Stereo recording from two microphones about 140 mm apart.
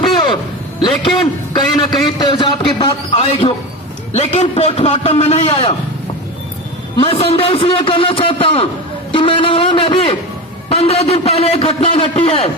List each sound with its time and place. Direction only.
0.8 s a man's voice: 35° left (ahead or behind)
7.0 s a man's voice: 40° left (ahead or behind)